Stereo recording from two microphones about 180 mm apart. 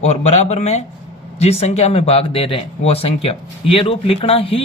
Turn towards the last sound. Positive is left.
turn(degrees=30)  # may be behind; listen again after turning